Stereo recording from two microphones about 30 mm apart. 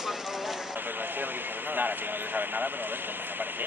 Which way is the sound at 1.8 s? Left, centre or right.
Right.